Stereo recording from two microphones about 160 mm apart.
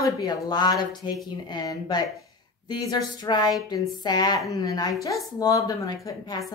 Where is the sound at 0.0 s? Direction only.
25° left (ahead or behind).